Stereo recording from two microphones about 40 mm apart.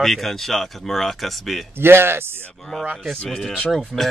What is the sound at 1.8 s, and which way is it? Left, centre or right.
Speech, right.